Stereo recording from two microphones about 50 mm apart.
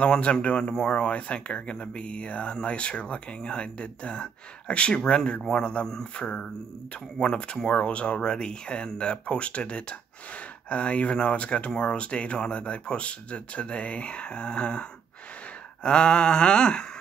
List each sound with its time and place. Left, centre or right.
0.0 s speech: left